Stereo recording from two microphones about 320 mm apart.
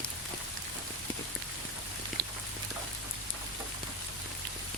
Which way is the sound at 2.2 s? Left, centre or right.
Right.